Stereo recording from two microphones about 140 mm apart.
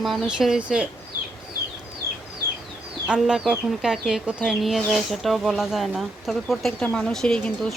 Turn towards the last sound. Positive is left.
turn(degrees=5)  # may be behind; listen again after turning